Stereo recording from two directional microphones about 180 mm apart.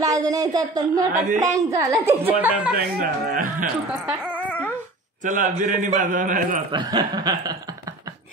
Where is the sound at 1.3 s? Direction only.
20° right (ahead or behind).